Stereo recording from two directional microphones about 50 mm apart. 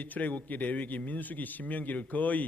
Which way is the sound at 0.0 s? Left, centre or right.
Left.